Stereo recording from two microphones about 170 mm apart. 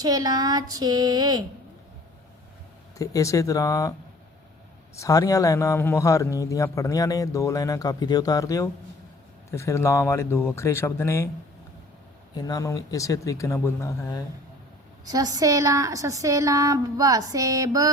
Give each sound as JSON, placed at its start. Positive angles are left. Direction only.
{"t": 0.0, "sound": "a woman's voice", "side_deg": -20}
{"t": 3.0, "sound": "a man's voice", "side_deg": 20}
{"t": 4.9, "sound": "a man's voice", "side_deg": 20}
{"t": 12.4, "sound": "a man's voice", "side_deg": 20}
{"t": 15.0, "sound": "a woman's voice", "side_deg": -20}